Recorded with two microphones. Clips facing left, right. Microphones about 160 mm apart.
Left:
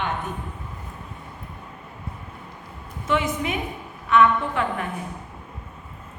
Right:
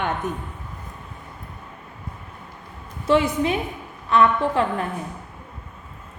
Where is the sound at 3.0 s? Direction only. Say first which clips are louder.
Right 5 dB; 30° right (ahead or behind).